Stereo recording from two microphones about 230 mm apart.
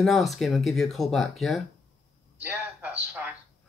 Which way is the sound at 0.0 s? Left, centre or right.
Centre.